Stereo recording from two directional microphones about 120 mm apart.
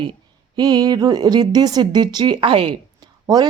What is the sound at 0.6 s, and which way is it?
Speech, 35° right (ahead or behind).